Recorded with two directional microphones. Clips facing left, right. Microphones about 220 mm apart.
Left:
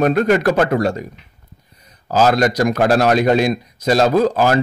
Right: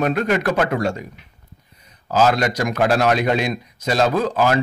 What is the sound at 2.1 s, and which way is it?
Speech, 40° left (ahead or behind).